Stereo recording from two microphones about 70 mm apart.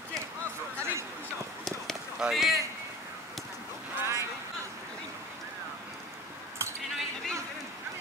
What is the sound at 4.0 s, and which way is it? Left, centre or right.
Vehicle, right.